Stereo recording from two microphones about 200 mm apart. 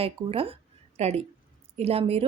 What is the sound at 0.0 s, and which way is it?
A woman's voice, 30° right (ahead or behind).